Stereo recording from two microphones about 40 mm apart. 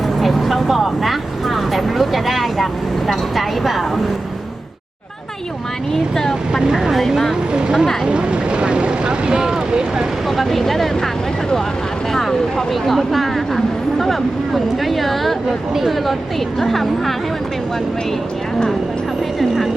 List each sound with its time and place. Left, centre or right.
0.2 s vehicle: centre
6.7 s vehicle: centre
10.2 s vehicle: centre
12.1 s a sound: centre
16.6 s a woman's voice: centre